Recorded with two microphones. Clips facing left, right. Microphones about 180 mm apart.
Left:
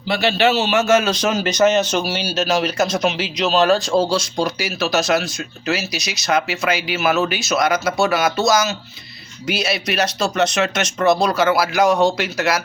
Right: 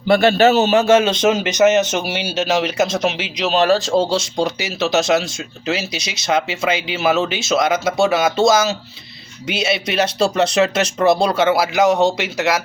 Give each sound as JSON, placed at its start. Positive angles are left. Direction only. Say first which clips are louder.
{"t": 0.1, "sound": "speech", "louder": "right 5 dB", "side_deg": -50}
{"t": 4.1, "sound": "speech", "louder": "right 1 dB", "side_deg": -20}